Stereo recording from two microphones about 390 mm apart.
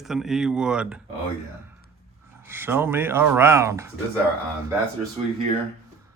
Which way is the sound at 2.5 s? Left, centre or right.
Centre.